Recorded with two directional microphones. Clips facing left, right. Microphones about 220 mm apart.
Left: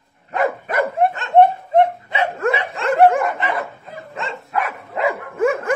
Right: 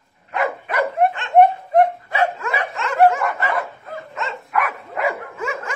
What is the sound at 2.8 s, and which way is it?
Dog, 35° left (ahead or behind).